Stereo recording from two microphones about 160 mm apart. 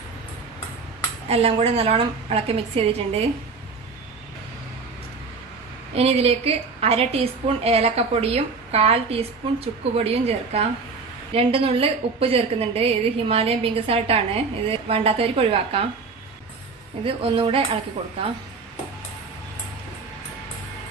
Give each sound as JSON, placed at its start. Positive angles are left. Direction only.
{"t": 1.3, "sound": "a woman's voice", "side_deg": -35}
{"t": 6.0, "sound": "a woman's voice", "side_deg": -40}
{"t": 17.0, "sound": "a woman's voice", "side_deg": -35}